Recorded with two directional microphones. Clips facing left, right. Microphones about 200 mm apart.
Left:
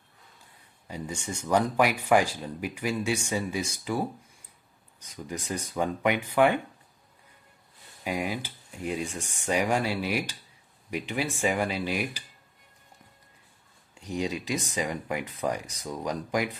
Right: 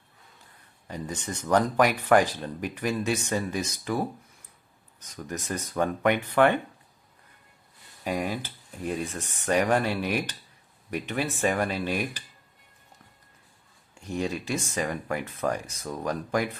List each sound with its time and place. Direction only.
0.9 s speech: 10° left (ahead or behind)
8.0 s speech: 10° left (ahead or behind)
14.0 s speech: 15° left (ahead or behind)